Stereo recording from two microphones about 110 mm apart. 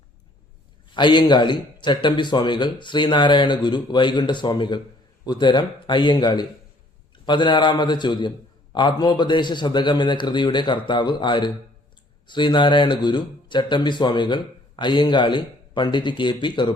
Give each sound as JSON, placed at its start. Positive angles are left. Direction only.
{"t": 0.9, "sound": "speech", "side_deg": 45}